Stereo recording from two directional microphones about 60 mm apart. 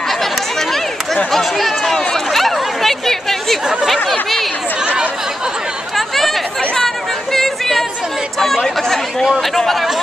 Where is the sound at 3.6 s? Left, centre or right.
Centre.